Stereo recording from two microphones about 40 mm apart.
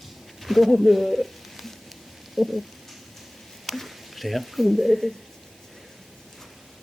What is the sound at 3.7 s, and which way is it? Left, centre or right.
Speech, centre.